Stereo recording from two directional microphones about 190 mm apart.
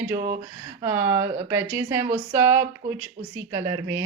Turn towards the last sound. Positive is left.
turn(degrees=-15)  # may be behind; listen again after turning